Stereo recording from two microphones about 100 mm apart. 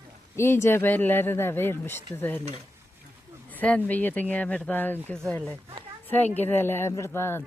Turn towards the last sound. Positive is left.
turn(degrees=25)  # may be behind; listen again after turning